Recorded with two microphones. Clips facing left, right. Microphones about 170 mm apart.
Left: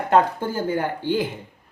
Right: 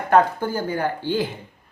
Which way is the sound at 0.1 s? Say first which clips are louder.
Right 1 dB; 25° left (ahead or behind).